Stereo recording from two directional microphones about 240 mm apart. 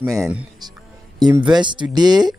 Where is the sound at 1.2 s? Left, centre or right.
Centre.